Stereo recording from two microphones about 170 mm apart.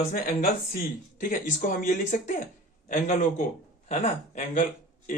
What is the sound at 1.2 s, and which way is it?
A man's voice, 55° left (ahead or behind).